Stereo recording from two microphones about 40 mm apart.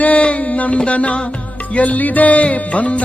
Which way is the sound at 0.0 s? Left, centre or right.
Left.